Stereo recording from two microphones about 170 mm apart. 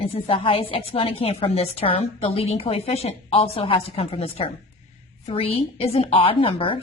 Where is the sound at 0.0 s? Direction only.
30° left (ahead or behind).